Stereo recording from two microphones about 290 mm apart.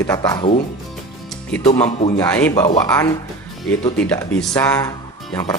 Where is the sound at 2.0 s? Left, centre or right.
Centre.